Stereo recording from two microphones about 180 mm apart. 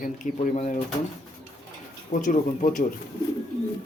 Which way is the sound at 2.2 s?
45° left (ahead or behind).